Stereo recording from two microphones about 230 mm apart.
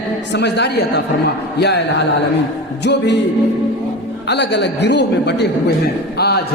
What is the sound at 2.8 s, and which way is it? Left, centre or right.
Speech, left.